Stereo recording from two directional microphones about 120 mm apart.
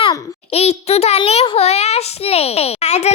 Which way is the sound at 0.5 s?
60° left (ahead or behind).